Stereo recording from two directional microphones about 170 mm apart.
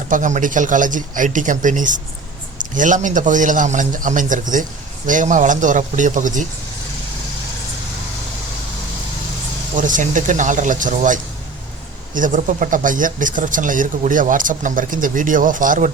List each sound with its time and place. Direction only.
0.1 s speech: 45° right (ahead or behind)
9.7 s speech: 50° right (ahead or behind)